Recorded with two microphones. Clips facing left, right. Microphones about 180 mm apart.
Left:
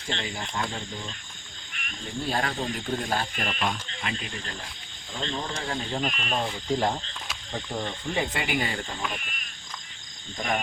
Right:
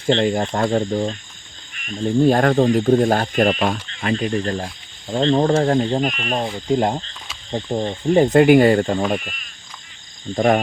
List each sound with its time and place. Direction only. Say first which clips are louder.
0.1 s speech: right 16 dB; 55° right (ahead or behind)
2.2 s speech: right 14 dB; 50° right (ahead or behind)
6.7 s speech: right 8 dB; 20° right (ahead or behind)
7.5 s speech: right 10 dB; 30° right (ahead or behind)
10.3 s speech: right 13 dB; 55° right (ahead or behind)